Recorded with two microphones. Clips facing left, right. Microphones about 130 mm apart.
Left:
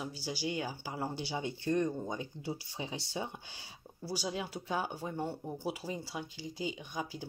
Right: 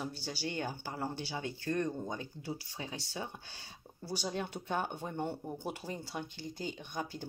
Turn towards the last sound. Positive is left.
turn(degrees=5)  # may be behind; listen again after turning